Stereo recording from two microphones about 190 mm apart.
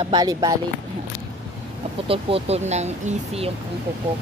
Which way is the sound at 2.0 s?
30° right (ahead or behind).